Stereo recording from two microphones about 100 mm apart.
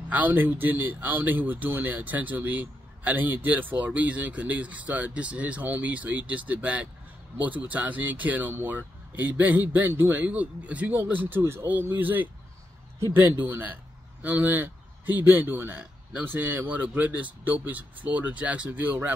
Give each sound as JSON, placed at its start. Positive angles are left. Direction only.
{"t": 0.1, "sound": "a man's voice", "side_deg": -20}